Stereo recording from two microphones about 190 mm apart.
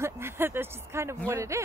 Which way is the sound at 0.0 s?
10° right (ahead or behind).